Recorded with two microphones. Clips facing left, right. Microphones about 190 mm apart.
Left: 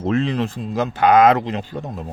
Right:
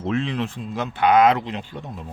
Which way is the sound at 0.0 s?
40° left (ahead or behind).